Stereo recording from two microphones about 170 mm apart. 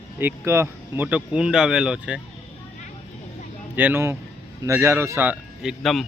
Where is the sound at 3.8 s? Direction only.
10° right (ahead or behind).